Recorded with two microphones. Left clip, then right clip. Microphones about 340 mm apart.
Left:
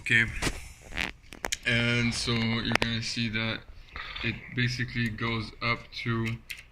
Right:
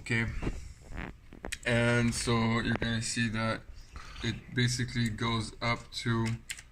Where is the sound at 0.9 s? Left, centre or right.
Left.